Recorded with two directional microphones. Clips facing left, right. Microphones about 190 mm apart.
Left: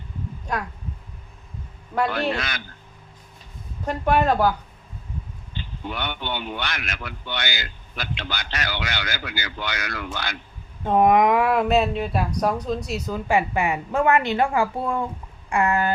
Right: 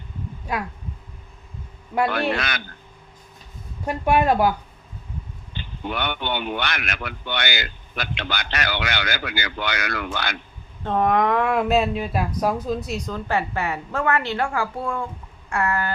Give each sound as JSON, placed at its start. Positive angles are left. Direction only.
{"t": 0.5, "sound": "speech", "side_deg": -5}
{"t": 2.1, "sound": "a man's voice", "side_deg": -65}
{"t": 3.8, "sound": "speech", "side_deg": -10}
{"t": 5.5, "sound": "a man's voice", "side_deg": -65}
{"t": 10.8, "sound": "speech", "side_deg": 15}